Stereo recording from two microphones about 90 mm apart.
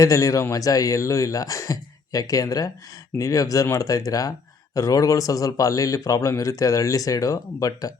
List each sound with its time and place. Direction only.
0.0 s speech: 40° left (ahead or behind)